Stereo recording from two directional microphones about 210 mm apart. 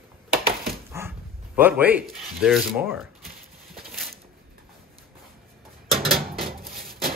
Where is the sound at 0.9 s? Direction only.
10° right (ahead or behind).